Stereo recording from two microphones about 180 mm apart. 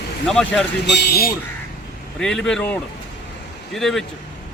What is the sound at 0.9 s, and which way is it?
Speech, 65° left (ahead or behind).